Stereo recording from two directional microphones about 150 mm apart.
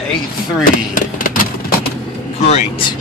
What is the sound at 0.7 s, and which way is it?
Vehicle, 65° left (ahead or behind).